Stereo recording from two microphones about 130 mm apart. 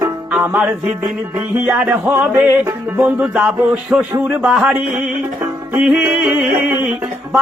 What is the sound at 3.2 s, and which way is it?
Music, 5° right (ahead or behind).